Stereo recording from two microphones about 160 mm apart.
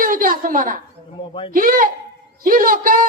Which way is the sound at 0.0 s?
60° right (ahead or behind).